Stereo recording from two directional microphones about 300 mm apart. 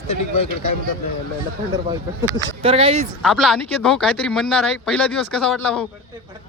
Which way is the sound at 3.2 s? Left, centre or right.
Centre.